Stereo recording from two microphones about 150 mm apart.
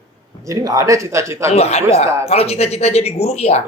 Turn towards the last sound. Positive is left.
turn(degrees=45)  # may be behind; listen again after turning